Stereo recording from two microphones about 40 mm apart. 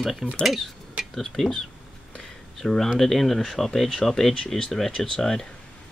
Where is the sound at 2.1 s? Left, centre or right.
Centre.